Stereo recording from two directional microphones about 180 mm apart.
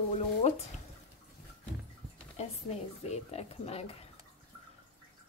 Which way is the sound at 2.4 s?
35° left (ahead or behind).